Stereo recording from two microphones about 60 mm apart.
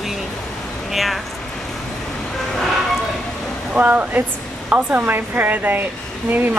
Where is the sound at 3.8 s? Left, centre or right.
Right.